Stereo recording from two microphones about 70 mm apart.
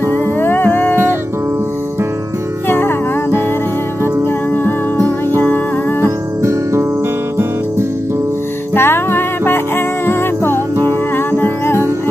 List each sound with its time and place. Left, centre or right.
0.1 s music: left
2.7 s music: left
4.9 s music: right
5.4 s music: left
6.4 s music: right
8.7 s music: left